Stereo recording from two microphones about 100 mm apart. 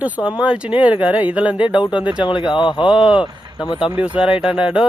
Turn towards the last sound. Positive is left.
turn(degrees=-10)  # may be behind; listen again after turning